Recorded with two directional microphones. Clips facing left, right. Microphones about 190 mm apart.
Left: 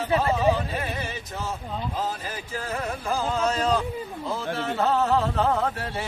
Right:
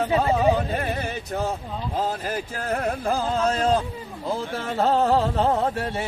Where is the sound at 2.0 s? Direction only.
55° right (ahead or behind).